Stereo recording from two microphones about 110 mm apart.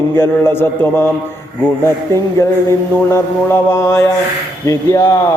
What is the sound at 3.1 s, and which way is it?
Mantra, 20° left (ahead or behind).